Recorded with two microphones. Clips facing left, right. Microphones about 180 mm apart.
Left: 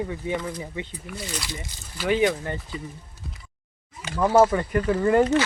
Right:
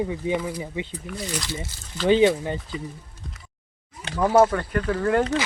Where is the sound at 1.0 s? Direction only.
5° left (ahead or behind).